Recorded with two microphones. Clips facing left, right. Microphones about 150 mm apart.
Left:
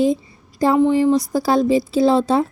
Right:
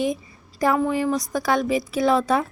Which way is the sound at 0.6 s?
25° left (ahead or behind).